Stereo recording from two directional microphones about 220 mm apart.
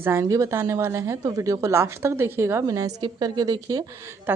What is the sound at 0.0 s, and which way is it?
A woman's voice, 10° right (ahead or behind).